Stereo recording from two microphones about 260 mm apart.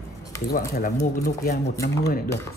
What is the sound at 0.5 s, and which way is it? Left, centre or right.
Speech, left.